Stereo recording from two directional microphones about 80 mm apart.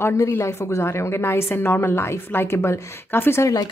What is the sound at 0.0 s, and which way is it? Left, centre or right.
A woman's voice, left.